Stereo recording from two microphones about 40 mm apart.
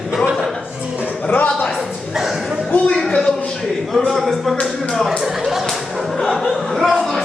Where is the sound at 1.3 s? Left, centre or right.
Left.